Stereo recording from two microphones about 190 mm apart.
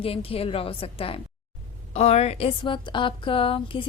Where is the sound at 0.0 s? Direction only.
30° left (ahead or behind).